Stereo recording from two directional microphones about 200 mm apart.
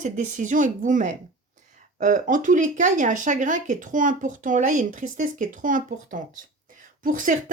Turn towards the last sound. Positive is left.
turn(degrees=-40)  # may be behind; listen again after turning